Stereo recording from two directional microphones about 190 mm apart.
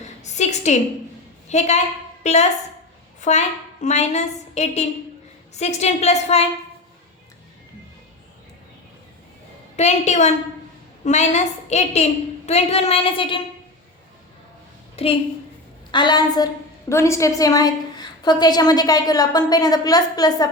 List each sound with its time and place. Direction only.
0.0 s a sound: 35° left (ahead or behind)
1.5 s a woman's voice: 35° left (ahead or behind)
9.7 s a woman's voice: 35° left (ahead or behind)
15.0 s a woman's voice: 30° left (ahead or behind)